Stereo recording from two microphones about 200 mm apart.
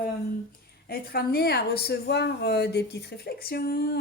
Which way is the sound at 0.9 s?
50° left (ahead or behind).